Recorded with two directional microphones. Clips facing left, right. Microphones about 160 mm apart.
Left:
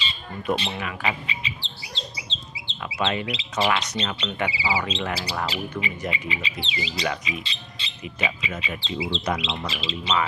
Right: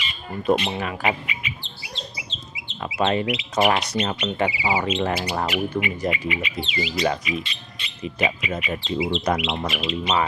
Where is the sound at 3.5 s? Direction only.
35° right (ahead or behind).